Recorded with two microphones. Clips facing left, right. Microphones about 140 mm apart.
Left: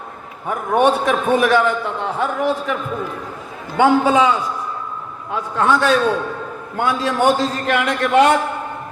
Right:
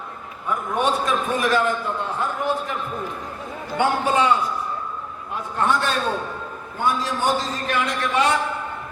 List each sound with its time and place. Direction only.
0.4 s a man's voice: 60° left (ahead or behind); by 2.7 s 90° left
3.8 s a man's voice: 90° left
5.3 s a man's voice: 90° left
6.7 s a man's voice: 70° left (ahead or behind)